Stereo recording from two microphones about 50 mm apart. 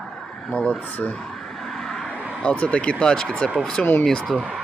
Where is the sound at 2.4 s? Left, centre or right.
Left; by 4.3 s centre.